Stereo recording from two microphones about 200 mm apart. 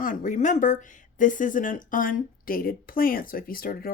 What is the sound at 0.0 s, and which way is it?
Speech, 40° left (ahead or behind).